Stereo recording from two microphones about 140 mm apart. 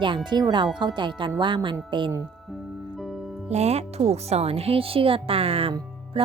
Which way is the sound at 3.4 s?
50° right (ahead or behind).